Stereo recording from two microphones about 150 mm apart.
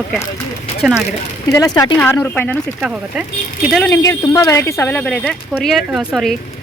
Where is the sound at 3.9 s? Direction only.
20° left (ahead or behind); by 6.3 s 5° right (ahead or behind).